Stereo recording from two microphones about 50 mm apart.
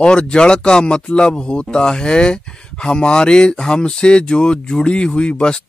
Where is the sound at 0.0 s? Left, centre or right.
Centre.